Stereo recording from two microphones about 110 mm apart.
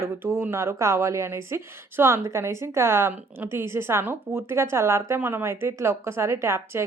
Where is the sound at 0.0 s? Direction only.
25° right (ahead or behind).